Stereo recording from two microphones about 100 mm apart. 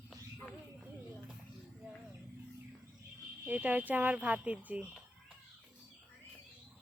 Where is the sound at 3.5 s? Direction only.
15° right (ahead or behind).